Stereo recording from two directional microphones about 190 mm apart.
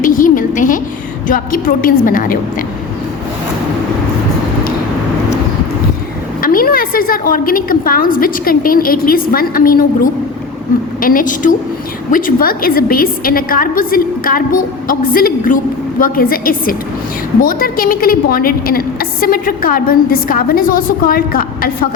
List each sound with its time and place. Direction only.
0.0 s a sound: 45° left (ahead or behind)
1.3 s a woman's voice: 45° left (ahead or behind)
6.4 s a woman's voice: 50° left (ahead or behind)